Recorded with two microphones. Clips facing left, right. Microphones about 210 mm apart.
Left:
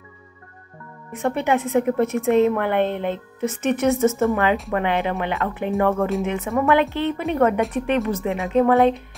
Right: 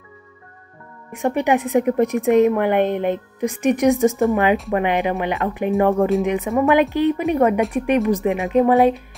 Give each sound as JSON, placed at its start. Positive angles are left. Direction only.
{"t": 1.1, "sound": "a woman's voice", "side_deg": -15}